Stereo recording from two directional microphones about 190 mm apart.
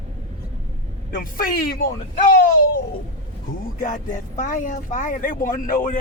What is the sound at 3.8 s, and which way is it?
A man's voice, 40° left (ahead or behind).